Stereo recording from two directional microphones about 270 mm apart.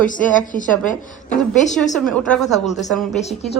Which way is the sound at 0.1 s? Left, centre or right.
Left.